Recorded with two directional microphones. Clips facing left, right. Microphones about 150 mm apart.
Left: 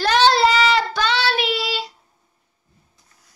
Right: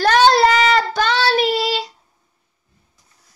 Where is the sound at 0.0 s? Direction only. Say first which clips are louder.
Right 3 dB; 45° right (ahead or behind).